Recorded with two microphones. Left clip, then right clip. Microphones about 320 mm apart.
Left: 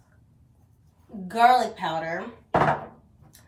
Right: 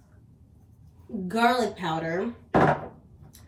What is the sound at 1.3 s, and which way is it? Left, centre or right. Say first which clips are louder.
Speech: left 5 dB; centre.